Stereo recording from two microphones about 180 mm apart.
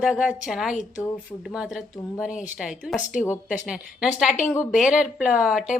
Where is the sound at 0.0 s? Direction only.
5° right (ahead or behind).